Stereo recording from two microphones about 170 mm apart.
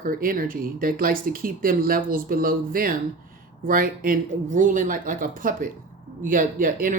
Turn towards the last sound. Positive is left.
turn(degrees=-55)  # may be behind; listen again after turning